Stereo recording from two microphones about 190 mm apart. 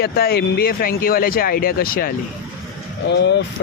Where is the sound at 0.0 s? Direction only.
55° left (ahead or behind).